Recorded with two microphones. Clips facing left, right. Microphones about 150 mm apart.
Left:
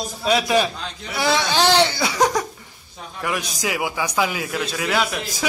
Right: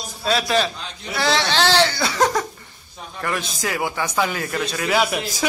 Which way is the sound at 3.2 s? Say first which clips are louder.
Even; 10° left (ahead or behind).